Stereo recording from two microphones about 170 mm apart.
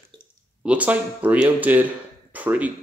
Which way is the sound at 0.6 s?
10° right (ahead or behind).